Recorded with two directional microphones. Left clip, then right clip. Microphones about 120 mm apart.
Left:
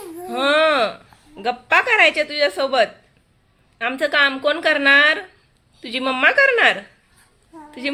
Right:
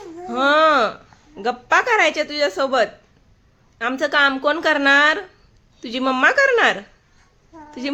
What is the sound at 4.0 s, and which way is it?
A woman's voice, 40° right (ahead or behind).